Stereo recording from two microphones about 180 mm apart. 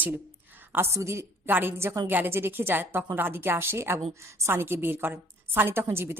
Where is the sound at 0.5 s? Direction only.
10° right (ahead or behind).